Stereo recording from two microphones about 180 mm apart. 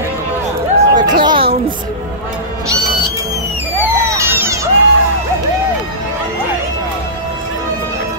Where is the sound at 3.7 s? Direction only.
15° right (ahead or behind).